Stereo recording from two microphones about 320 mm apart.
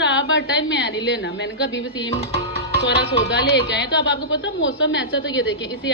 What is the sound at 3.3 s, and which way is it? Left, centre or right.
A woman's voice, left.